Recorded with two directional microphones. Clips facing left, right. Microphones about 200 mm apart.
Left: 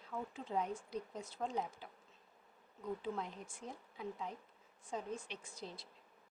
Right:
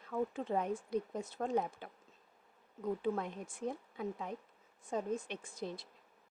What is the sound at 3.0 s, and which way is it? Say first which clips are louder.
A woman's voice: right 6 dB; 55° right (ahead or behind).